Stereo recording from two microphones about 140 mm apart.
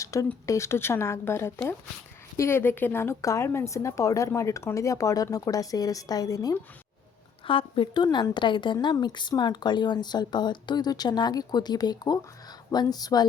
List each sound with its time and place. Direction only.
0.0 s speech: 20° left (ahead or behind)
7.4 s a woman's voice: 40° left (ahead or behind)